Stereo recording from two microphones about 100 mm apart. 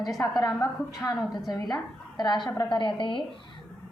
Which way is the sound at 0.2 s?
35° left (ahead or behind).